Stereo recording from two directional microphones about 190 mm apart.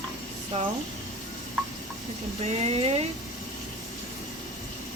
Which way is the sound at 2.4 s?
30° right (ahead or behind).